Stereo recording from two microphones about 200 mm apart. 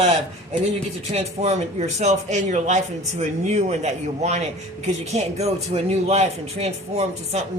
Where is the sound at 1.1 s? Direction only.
35° right (ahead or behind).